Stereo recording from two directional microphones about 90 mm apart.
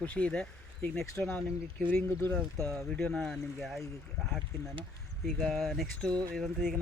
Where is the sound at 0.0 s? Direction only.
15° left (ahead or behind).